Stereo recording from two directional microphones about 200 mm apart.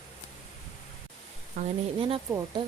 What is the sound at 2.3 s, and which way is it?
Speech, 15° right (ahead or behind).